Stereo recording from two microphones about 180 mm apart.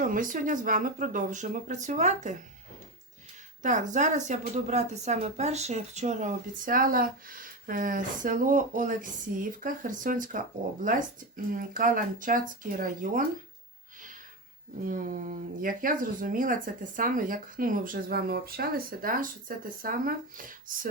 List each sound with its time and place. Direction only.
0.0 s a woman's voice: 50° right (ahead or behind)
3.6 s a woman's voice: 45° right (ahead or behind)
11.5 s a woman's voice: 45° right (ahead or behind)
14.8 s a woman's voice: 50° right (ahead or behind)